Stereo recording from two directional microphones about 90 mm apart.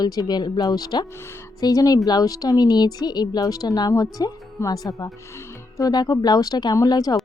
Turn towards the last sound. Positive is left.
turn(degrees=45)  # may be behind; listen again after turning